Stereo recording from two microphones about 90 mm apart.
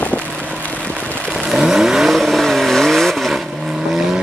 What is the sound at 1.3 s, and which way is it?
Vehicle, centre (ahead or behind).